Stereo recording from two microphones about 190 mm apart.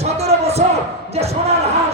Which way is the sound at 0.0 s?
35° right (ahead or behind).